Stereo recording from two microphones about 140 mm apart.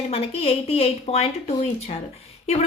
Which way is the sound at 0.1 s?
45° left (ahead or behind).